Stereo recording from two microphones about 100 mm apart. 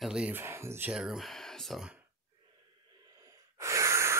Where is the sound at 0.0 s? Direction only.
10° right (ahead or behind).